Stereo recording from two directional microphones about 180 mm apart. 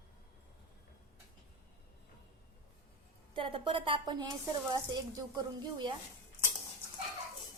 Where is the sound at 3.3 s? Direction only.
30° right (ahead or behind).